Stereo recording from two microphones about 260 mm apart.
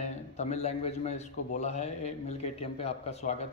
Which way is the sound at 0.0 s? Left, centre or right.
Left.